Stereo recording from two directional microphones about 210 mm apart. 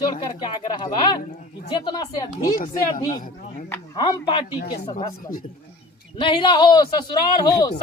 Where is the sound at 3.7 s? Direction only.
15° left (ahead or behind).